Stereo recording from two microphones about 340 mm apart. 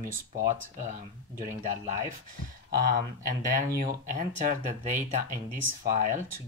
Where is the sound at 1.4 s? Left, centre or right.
Right.